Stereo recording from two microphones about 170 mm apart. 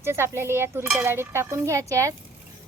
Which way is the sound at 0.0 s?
15° right (ahead or behind).